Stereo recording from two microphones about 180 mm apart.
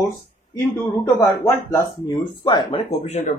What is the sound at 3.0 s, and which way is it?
Speech, 40° left (ahead or behind).